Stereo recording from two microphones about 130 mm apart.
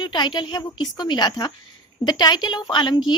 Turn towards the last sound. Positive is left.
turn(degrees=35)  # may be behind; listen again after turning